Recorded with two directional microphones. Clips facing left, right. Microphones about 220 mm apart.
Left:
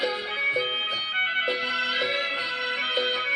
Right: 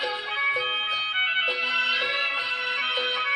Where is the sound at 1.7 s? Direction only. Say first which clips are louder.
Left 5 dB; 40° left (ahead or behind).